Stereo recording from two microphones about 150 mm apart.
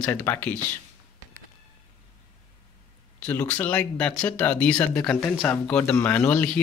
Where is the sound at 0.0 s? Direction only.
15° left (ahead or behind).